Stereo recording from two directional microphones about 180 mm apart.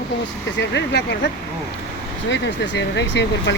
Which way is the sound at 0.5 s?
75° left (ahead or behind).